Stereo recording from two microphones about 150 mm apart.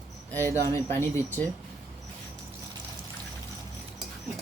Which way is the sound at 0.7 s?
15° left (ahead or behind).